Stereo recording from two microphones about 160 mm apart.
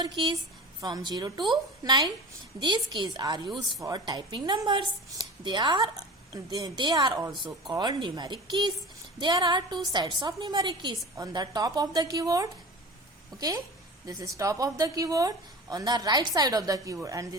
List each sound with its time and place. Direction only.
0.0 s a woman's voice: 30° right (ahead or behind)
14.1 s a woman's voice: 20° right (ahead or behind)